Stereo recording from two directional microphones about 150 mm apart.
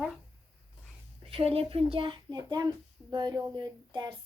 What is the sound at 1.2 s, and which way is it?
Speech, 40° right (ahead or behind).